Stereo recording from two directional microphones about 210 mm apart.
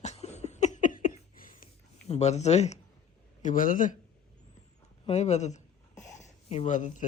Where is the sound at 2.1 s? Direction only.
30° left (ahead or behind).